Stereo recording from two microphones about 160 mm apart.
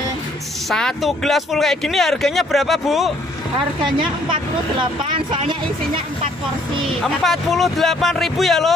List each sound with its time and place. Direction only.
0.7 s speech: centre (ahead or behind)
4.0 s speech: 30° right (ahead or behind)
7.0 s speech: centre (ahead or behind)